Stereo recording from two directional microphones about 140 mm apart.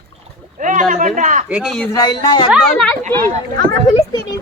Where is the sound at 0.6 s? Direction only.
65° right (ahead or behind).